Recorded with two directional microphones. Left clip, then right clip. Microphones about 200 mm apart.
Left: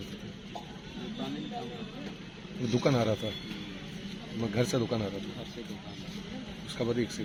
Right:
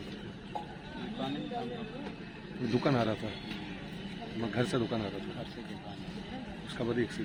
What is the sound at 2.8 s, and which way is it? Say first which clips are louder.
Speech: left 3 dB; 50° left (ahead or behind).